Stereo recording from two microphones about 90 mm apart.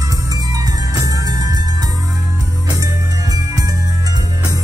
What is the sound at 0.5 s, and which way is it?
Music, 40° right (ahead or behind).